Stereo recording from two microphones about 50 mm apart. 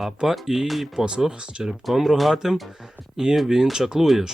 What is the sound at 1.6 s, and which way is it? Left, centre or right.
Speech, centre.